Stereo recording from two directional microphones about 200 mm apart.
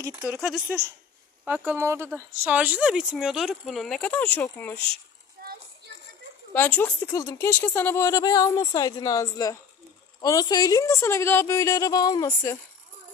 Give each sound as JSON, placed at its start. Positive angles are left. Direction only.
{"t": 0.2, "sound": "speech", "side_deg": 0}
{"t": 6.5, "sound": "speech", "side_deg": 5}